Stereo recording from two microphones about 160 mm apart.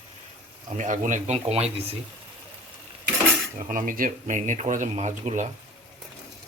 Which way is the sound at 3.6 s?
55° right (ahead or behind).